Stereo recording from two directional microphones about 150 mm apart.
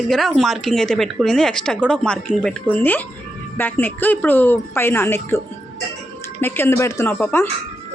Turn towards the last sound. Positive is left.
turn(degrees=15)  # may be behind; listen again after turning